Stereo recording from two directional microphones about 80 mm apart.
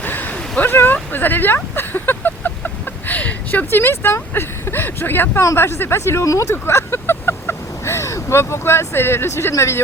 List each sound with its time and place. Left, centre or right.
0.0 s speech: left